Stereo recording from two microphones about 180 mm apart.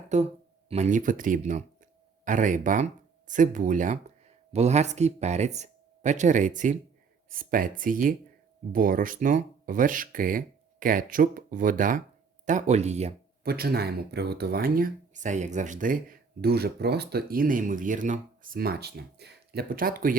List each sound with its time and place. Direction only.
0.1 s speech: 40° right (ahead or behind)
13.4 s speech: 60° right (ahead or behind)